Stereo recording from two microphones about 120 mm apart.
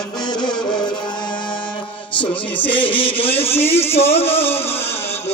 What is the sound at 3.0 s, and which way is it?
Speech, 50° left (ahead or behind).